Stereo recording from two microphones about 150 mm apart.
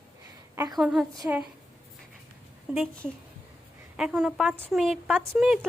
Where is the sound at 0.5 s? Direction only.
25° right (ahead or behind).